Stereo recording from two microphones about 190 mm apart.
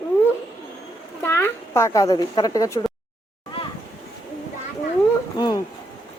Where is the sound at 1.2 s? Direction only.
15° left (ahead or behind).